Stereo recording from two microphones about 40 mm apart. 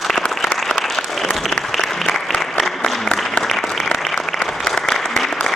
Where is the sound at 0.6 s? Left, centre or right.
Centre.